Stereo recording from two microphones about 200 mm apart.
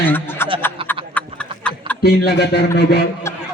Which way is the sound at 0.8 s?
25° right (ahead or behind).